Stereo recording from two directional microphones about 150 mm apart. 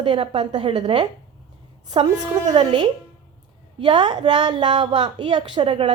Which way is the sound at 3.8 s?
30° right (ahead or behind).